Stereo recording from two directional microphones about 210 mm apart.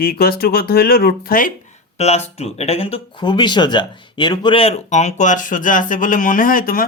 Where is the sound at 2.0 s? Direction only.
30° left (ahead or behind).